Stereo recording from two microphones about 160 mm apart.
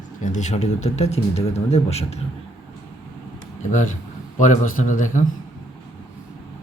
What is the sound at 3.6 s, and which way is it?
Speech, 50° left (ahead or behind).